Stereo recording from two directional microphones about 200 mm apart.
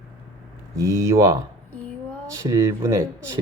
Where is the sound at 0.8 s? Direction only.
15° right (ahead or behind).